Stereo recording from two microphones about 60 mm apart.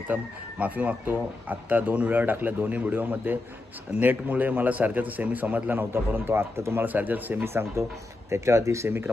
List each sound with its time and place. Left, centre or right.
0.1 s a man's voice: right
6.8 s a man's voice: right
7.4 s speech: right